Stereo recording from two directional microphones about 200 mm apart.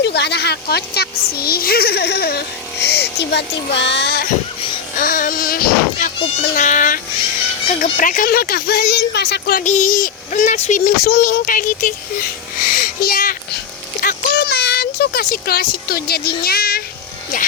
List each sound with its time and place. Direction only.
0.0 s speech: 55° left (ahead or behind)
4.9 s a child's voice: 40° left (ahead or behind)
12.6 s a sound: 45° left (ahead or behind)